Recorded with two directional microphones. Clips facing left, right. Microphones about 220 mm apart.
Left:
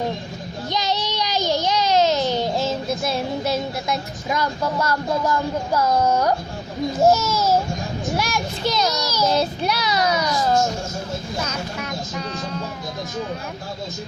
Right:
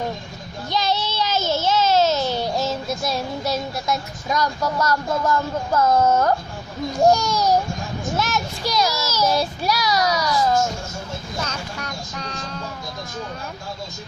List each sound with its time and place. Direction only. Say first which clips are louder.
0.7 s child singing: right 1 dB; 15° left (ahead or behind)
6.9 s a child's voice: even; 5° left (ahead or behind)
8.6 s child singing: left 1 dB; 25° left (ahead or behind)
11.4 s music: left 3 dB; 5° left (ahead or behind)